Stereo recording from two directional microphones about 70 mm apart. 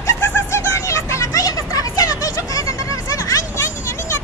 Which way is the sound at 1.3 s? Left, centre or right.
Left.